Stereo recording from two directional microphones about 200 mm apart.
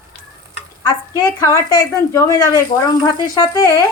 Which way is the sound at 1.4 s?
15° left (ahead or behind).